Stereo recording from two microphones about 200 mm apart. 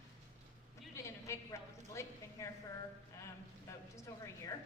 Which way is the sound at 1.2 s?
15° left (ahead or behind).